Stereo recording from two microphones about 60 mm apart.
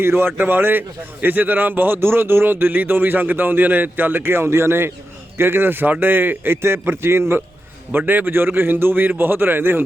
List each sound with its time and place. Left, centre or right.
0.0 s a man's voice: right